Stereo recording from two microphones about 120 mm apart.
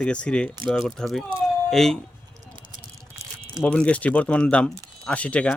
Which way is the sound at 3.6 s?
10° left (ahead or behind).